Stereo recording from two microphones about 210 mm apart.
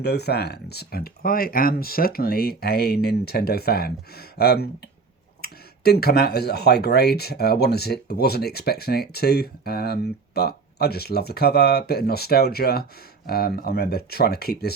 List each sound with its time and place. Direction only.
0.0 s speech: 50° left (ahead or behind)